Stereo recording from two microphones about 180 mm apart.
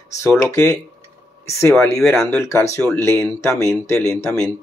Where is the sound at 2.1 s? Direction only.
15° left (ahead or behind).